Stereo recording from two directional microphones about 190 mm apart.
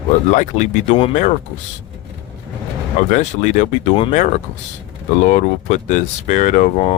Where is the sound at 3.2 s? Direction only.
40° left (ahead or behind).